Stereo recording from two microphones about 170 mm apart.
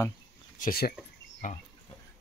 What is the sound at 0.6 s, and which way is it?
Speech, 60° left (ahead or behind).